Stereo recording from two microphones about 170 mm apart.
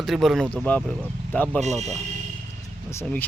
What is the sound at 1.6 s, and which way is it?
Speech, 40° right (ahead or behind).